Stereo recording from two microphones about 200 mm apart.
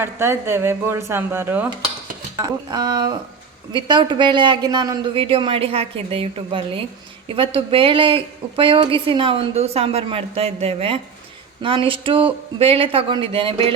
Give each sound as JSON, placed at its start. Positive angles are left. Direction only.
{"t": 0.0, "sound": "a woman's voice", "side_deg": -10}